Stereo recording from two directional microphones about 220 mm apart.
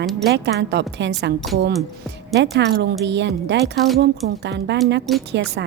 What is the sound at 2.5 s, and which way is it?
A woman's voice, 50° right (ahead or behind).